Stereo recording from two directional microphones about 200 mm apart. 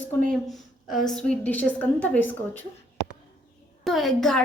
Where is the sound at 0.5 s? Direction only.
Centre (ahead or behind).